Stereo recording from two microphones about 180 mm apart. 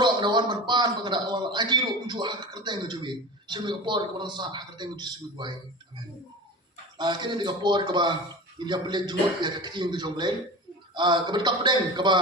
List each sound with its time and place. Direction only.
0.0 s a man's voice: 25° right (ahead or behind)
7.0 s a man's voice: 25° right (ahead or behind)